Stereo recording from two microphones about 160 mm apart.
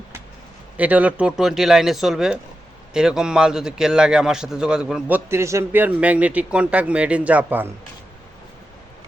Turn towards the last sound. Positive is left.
turn(degrees=-10)  # may be behind; listen again after turning